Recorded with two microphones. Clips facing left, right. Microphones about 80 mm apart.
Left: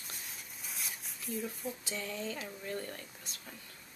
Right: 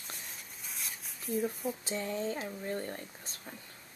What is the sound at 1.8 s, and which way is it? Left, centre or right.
Speech, right.